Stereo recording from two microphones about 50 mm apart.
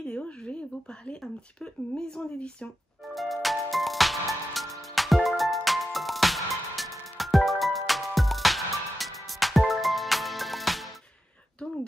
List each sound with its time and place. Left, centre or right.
0.0 s a sound: left
1.6 s speech: centre
3.0 s music: centre